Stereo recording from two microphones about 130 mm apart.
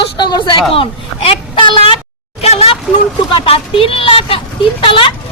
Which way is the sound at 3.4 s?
45° left (ahead or behind).